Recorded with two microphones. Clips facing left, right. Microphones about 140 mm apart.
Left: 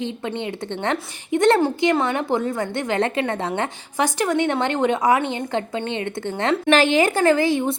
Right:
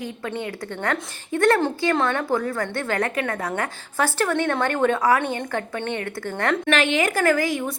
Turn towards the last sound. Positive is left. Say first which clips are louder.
# left 4 dB
turn(degrees=25)  # may be behind; listen again after turning